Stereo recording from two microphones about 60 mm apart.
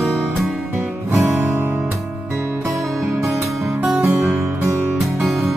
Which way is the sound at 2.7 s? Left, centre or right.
Centre.